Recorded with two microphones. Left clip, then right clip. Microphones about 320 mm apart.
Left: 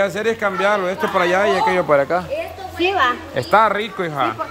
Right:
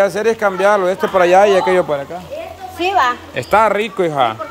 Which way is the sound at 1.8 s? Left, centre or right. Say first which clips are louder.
Left 5 dB; centre.